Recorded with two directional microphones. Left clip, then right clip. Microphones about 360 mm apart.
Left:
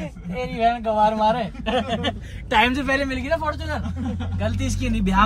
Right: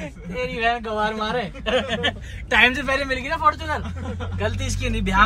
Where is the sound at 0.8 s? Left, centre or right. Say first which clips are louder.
Left 6 dB; centre.